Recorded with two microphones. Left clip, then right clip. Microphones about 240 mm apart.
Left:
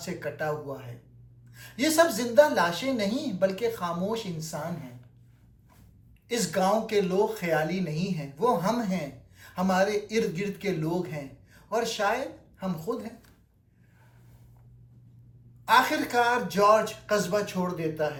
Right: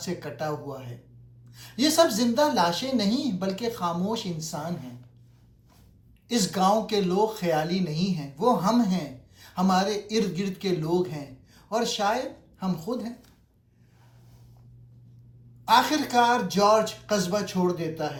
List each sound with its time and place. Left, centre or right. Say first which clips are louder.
0.0 s speech: even; centre
6.2 s speech: right 2 dB; centre
15.6 s speech: right 1 dB; centre